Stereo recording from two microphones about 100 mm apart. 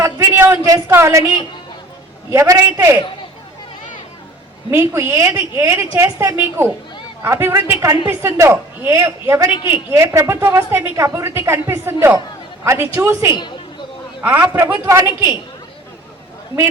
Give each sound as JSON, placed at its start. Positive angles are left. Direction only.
{"t": 0.0, "sound": "a sound", "side_deg": -30}
{"t": 2.3, "sound": "a woman's voice", "side_deg": -35}
{"t": 4.7, "sound": "a woman's voice", "side_deg": -25}
{"t": 14.2, "sound": "a man's voice", "side_deg": -20}